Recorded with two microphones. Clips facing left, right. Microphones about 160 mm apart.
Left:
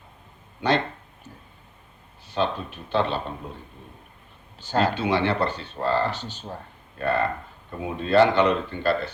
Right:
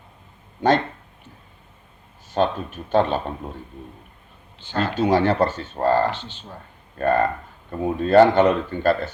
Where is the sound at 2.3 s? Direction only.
45° right (ahead or behind).